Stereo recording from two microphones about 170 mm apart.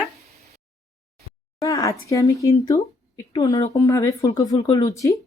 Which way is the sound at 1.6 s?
20° left (ahead or behind).